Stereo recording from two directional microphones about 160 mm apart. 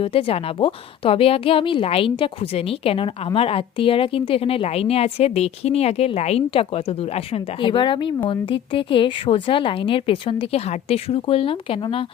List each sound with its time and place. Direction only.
0.0 s a woman's voice: 35° left (ahead or behind)